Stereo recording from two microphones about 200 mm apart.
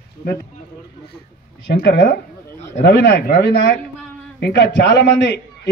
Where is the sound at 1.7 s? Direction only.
55° left (ahead or behind).